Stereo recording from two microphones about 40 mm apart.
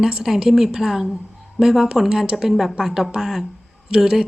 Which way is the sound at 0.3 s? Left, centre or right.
Centre.